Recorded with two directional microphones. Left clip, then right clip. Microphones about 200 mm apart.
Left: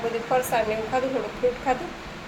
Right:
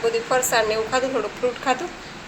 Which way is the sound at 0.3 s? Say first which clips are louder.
Even; 5° right (ahead or behind).